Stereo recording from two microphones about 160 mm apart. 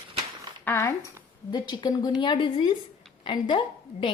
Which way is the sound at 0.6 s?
15° left (ahead or behind).